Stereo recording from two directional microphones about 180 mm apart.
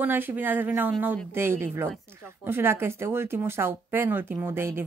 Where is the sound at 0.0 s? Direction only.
10° right (ahead or behind).